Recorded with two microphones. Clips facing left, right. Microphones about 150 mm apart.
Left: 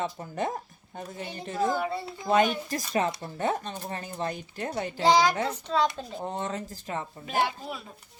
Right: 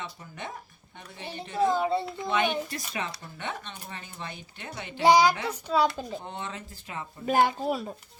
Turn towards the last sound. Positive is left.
turn(degrees=-40)  # may be behind; listen again after turning